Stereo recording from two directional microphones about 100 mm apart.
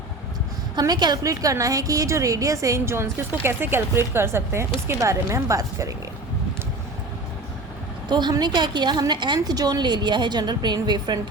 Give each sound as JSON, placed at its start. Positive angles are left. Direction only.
{"t": 0.8, "sound": "a woman's voice", "side_deg": -45}
{"t": 8.1, "sound": "a woman's voice", "side_deg": -45}